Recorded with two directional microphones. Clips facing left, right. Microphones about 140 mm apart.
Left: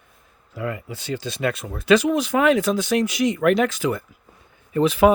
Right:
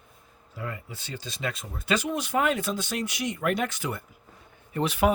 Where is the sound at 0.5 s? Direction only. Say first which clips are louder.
Left 8 dB; 90° left.